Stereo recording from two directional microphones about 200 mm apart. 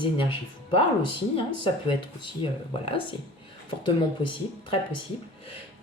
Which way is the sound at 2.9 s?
25° left (ahead or behind).